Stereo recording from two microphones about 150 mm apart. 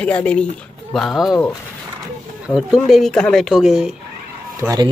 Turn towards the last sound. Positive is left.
turn(degrees=-25)  # may be behind; listen again after turning